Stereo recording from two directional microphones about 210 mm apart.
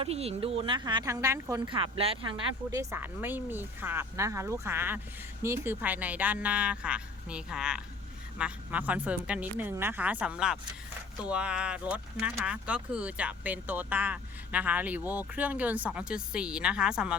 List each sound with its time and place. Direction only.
0.0 s speech: 30° right (ahead or behind); by 17.2 s 5° right (ahead or behind)